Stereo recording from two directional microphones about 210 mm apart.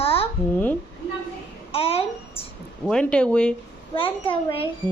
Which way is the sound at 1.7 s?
25° left (ahead or behind).